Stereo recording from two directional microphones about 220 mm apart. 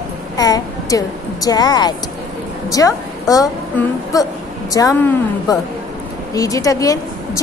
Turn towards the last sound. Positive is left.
turn(degrees=15)  # may be behind; listen again after turning